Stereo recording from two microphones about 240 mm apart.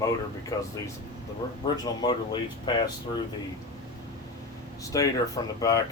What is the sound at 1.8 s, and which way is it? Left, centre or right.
Speech, centre.